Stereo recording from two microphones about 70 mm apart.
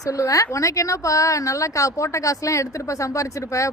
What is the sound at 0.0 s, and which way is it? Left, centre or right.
A woman's voice, left.